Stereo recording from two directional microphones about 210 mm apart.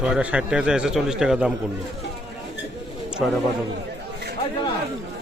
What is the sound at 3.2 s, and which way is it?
Speech, centre (ahead or behind).